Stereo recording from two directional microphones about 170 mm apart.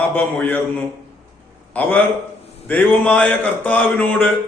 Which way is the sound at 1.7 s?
10° left (ahead or behind).